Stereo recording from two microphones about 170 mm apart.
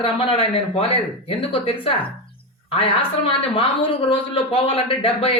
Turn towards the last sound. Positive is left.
turn(degrees=35)  # may be behind; listen again after turning